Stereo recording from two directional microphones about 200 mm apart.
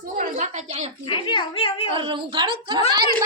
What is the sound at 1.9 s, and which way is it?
Speech, 25° right (ahead or behind).